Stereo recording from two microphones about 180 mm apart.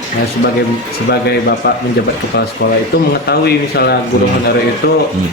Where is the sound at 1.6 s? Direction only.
60° left (ahead or behind).